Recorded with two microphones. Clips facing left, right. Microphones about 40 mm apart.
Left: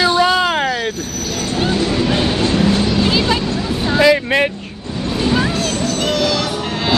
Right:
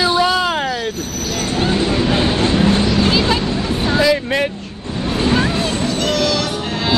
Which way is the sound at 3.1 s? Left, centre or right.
Centre.